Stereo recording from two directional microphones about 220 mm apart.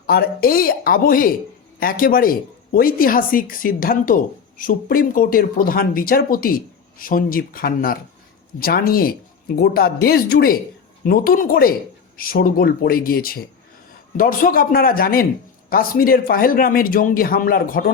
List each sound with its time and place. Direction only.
0.0 s a woman's voice: 45° left (ahead or behind)